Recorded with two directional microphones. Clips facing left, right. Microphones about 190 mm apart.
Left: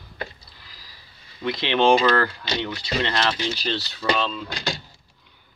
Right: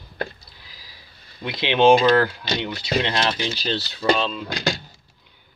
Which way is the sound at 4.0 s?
30° right (ahead or behind).